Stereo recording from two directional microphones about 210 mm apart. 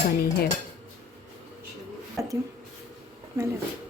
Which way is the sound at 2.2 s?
15° right (ahead or behind).